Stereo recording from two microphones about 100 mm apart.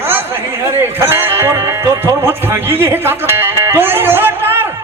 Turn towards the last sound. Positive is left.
turn(degrees=-20)  # may be behind; listen again after turning